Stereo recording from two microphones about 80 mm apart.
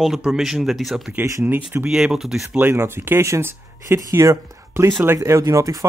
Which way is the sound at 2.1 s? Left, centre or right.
Centre.